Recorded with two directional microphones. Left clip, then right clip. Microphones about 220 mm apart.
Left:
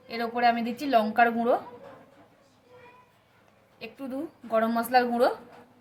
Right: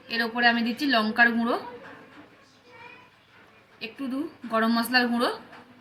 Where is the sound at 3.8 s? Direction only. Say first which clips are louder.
Right 3 dB; 50° left (ahead or behind).